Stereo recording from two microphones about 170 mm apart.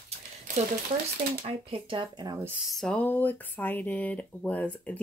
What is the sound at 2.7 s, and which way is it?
Speech, 5° left (ahead or behind).